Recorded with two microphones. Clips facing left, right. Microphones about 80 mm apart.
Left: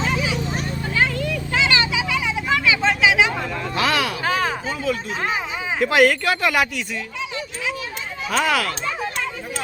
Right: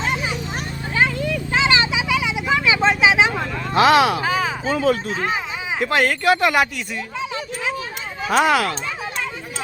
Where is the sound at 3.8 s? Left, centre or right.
Right.